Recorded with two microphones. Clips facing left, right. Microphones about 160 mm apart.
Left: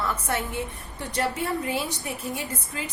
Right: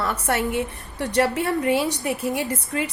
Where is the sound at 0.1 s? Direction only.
75° right (ahead or behind).